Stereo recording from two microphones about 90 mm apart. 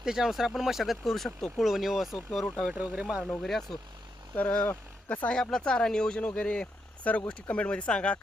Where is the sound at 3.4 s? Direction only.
5° left (ahead or behind).